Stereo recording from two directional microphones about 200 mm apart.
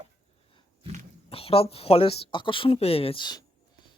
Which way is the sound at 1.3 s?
30° left (ahead or behind).